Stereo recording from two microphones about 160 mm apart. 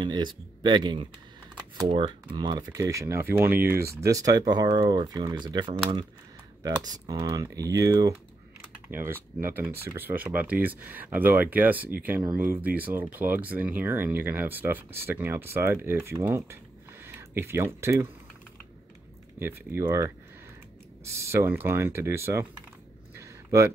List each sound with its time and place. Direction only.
0.0 s speech: 30° right (ahead or behind)
19.4 s speech: 15° right (ahead or behind)
23.1 s a sound: 20° right (ahead or behind)